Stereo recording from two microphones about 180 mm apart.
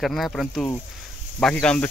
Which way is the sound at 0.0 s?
Centre (ahead or behind).